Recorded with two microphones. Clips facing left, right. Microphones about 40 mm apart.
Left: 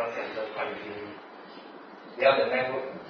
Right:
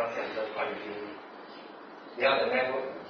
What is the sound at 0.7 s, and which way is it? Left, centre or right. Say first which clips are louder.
Speech: even; left.